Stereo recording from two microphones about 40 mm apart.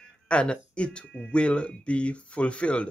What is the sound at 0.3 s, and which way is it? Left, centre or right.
Speech, left.